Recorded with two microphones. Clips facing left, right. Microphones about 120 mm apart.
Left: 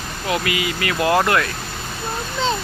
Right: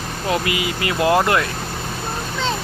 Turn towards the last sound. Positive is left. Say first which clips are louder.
# right 1 dB
turn(degrees=-20)  # may be behind; listen again after turning